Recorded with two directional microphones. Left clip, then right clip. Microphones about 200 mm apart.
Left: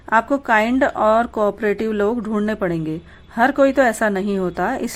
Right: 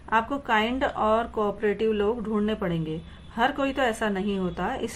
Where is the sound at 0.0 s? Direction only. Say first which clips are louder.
Left 8 dB; 40° left (ahead or behind).